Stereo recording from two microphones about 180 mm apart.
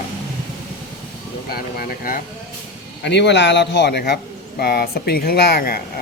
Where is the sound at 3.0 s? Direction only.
70° left (ahead or behind); by 5.8 s 55° left (ahead or behind).